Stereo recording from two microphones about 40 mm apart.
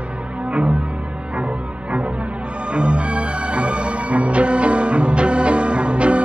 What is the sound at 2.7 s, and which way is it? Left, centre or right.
Music, right.